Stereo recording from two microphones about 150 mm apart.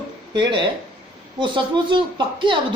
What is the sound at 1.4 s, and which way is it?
Speech, 35° right (ahead or behind).